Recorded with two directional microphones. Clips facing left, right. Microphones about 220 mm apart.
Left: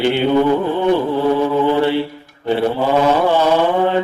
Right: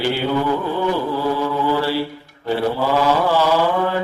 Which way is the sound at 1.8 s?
20° left (ahead or behind).